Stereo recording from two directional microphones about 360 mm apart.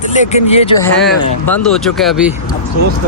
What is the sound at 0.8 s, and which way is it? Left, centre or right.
Speech, centre.